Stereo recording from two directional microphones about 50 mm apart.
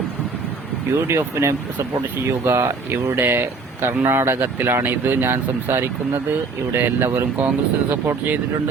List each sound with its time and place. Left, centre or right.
0.9 s speech: right